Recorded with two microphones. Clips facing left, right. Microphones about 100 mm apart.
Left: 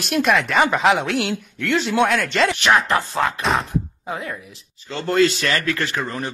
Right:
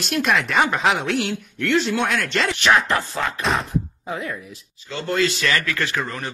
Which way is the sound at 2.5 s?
20° left (ahead or behind).